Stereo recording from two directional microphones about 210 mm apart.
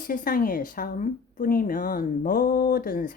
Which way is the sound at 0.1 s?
40° left (ahead or behind).